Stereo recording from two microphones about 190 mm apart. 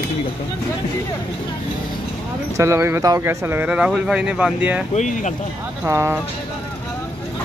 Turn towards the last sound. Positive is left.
turn(degrees=-15)  # may be behind; listen again after turning